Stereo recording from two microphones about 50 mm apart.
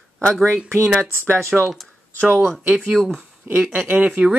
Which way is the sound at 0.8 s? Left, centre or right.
Centre.